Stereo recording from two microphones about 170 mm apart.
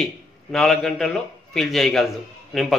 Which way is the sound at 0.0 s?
Centre (ahead or behind).